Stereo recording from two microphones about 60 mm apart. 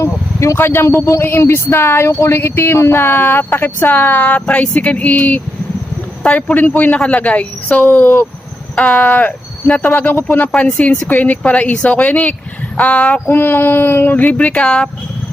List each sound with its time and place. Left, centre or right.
0.0 s a sound: left
0.5 s speech: left
3.0 s speech: left
10.5 s speech: left
13.2 s speech: left; by 14.8 s centre